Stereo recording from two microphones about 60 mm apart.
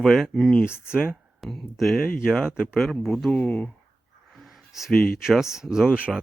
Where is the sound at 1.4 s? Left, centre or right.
Centre.